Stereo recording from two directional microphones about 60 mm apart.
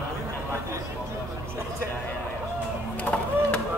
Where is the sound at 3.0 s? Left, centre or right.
Left.